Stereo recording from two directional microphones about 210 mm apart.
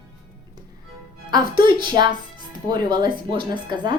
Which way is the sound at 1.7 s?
20° right (ahead or behind).